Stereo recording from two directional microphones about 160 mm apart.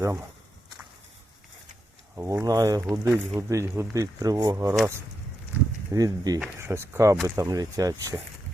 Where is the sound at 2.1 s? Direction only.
15° right (ahead or behind).